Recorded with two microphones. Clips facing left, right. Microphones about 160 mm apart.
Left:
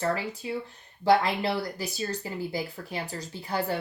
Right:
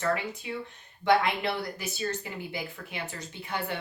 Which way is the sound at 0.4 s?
35° left (ahead or behind).